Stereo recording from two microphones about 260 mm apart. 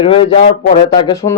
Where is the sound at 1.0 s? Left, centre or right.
Centre.